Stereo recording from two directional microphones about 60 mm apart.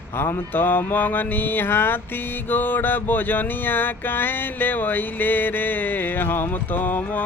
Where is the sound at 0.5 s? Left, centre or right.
Left.